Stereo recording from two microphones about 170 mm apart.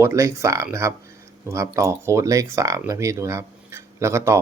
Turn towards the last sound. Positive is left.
turn(degrees=-15)  # may be behind; listen again after turning